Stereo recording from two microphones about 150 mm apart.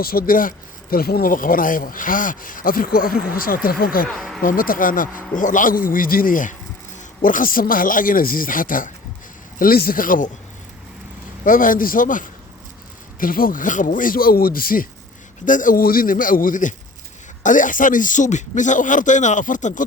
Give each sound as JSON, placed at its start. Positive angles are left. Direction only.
{"t": 0.0, "sound": "speech", "side_deg": 80}
{"t": 4.0, "sound": "speech", "side_deg": 0}
{"t": 4.4, "sound": "a man's voice", "side_deg": 70}
{"t": 9.6, "sound": "speech", "side_deg": 80}
{"t": 11.4, "sound": "a man's voice", "side_deg": 65}